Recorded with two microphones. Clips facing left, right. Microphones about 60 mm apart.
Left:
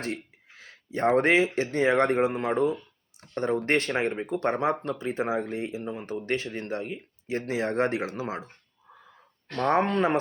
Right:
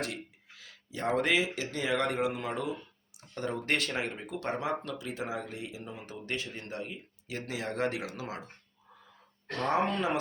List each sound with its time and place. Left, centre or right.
0.0 s speech: left
3.2 s a sound: left
3.7 s speech: left
9.6 s speech: left